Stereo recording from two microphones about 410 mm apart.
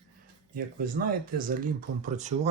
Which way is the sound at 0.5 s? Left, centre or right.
Right.